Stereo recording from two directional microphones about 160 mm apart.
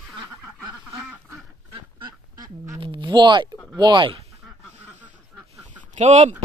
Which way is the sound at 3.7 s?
25° right (ahead or behind).